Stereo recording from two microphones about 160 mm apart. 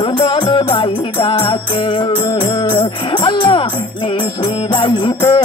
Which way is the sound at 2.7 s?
30° left (ahead or behind).